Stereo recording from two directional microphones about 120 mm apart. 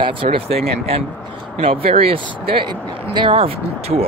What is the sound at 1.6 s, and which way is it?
Speech, 50° right (ahead or behind).